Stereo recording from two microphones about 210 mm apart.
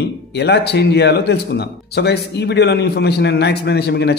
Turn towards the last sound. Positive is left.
turn(degrees=50)  # may be behind; listen again after turning